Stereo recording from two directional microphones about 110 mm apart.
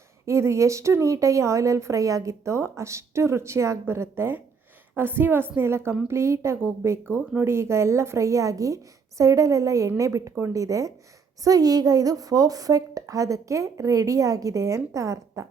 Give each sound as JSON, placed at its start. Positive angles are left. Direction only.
{"t": 0.3, "sound": "a woman's voice", "side_deg": -25}